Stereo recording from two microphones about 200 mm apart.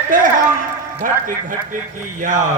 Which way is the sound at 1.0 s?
40° right (ahead or behind).